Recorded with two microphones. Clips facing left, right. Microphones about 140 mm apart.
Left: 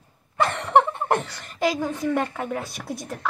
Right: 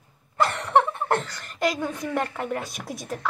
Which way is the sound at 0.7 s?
15° left (ahead or behind).